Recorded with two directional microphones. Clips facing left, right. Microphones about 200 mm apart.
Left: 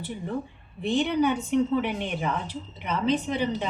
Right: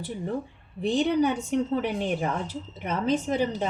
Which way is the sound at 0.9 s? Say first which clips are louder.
Right 1 dB; 40° right (ahead or behind).